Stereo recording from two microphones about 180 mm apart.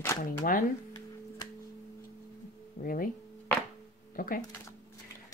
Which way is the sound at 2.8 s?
50° left (ahead or behind).